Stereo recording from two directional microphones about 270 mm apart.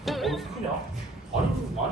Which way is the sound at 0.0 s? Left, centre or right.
Centre.